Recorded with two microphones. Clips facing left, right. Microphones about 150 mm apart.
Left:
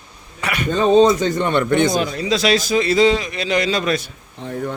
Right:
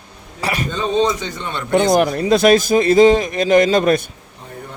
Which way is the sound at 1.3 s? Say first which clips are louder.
Left 9 dB; 60° left (ahead or behind).